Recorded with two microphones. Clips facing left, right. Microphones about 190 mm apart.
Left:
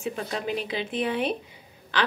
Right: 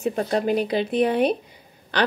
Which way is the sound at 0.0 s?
45° right (ahead or behind).